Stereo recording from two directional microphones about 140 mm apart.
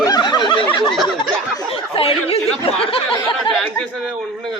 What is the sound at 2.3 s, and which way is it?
Speech, 40° left (ahead or behind).